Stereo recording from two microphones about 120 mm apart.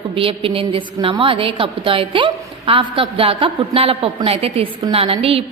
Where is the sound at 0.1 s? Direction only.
50° right (ahead or behind).